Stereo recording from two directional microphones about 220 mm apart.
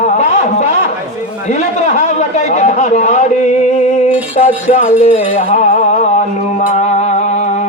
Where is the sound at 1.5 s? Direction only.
30° left (ahead or behind).